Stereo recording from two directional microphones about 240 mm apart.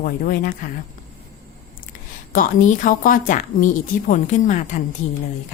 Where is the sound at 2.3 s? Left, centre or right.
Left.